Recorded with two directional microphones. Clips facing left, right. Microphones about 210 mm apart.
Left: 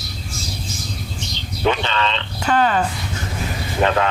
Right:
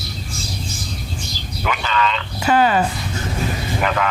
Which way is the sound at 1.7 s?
30° left (ahead or behind).